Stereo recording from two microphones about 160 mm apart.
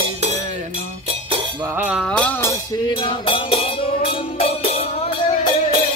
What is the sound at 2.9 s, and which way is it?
Music, 30° left (ahead or behind).